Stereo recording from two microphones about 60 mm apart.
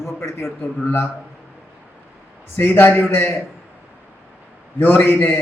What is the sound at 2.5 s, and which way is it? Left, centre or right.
Speech, left.